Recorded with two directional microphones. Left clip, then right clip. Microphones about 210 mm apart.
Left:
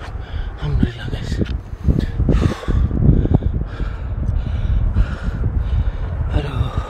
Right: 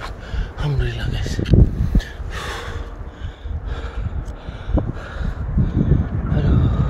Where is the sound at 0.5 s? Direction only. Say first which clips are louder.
Left 2 dB; 25° right (ahead or behind).